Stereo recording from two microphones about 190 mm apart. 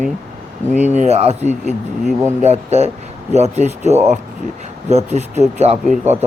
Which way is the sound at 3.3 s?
35° right (ahead or behind).